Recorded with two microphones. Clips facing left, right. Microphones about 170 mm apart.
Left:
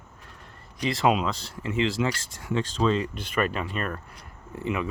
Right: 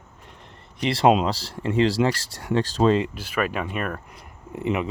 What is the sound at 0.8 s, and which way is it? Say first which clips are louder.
Speech: right 3 dB; 30° right (ahead or behind).